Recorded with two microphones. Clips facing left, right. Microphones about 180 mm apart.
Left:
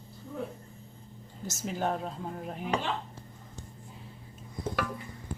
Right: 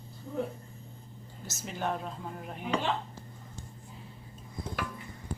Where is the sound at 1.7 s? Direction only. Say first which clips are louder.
Left 2 dB; 40° left (ahead or behind).